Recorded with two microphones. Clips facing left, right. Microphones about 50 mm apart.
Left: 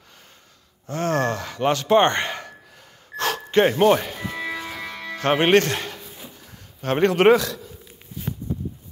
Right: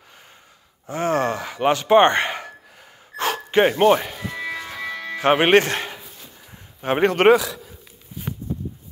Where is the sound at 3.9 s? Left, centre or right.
Centre.